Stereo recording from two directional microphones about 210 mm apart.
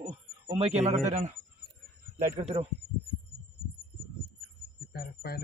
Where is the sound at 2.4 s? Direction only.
30° right (ahead or behind).